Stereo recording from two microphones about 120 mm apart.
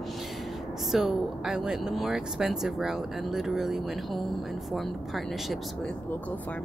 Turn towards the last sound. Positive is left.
turn(degrees=0)  # may be behind; listen again after turning